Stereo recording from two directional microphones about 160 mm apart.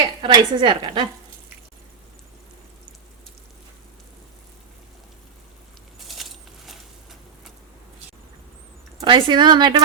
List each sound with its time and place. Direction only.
0.2 s a woman's voice: 30° right (ahead or behind)
6.0 s a sound: centre (ahead or behind)
9.0 s a woman's voice: 30° right (ahead or behind)